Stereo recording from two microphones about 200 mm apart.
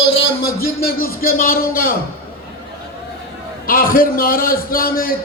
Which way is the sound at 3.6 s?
45° left (ahead or behind).